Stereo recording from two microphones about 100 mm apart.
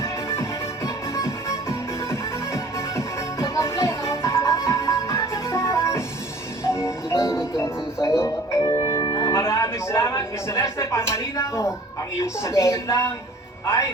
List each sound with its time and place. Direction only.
0.0 s music: 25° left (ahead or behind); by 9.3 s 40° left (ahead or behind)
9.3 s music: 25° left (ahead or behind)
12.2 s speech: 30° left (ahead or behind)